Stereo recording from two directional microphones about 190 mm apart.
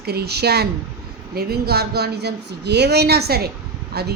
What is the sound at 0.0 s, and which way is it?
A woman's voice, 55° right (ahead or behind).